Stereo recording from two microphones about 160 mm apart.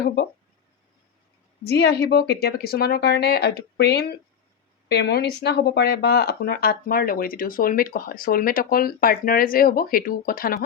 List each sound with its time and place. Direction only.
1.6 s speech: 90° left; by 10.6 s 65° left (ahead or behind)